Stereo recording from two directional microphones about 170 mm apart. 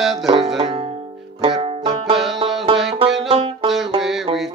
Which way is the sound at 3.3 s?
35° right (ahead or behind).